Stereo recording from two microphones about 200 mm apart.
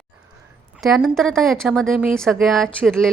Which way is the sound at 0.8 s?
Centre (ahead or behind).